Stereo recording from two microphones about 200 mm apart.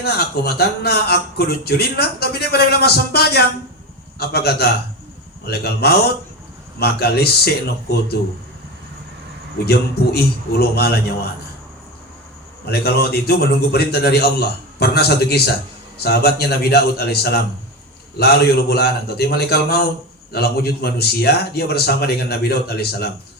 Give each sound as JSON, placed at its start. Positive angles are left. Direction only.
{"t": 0.0, "sound": "a man's voice", "side_deg": 55}
{"t": 9.6, "sound": "a man's voice", "side_deg": 50}
{"t": 12.6, "sound": "a man's voice", "side_deg": 55}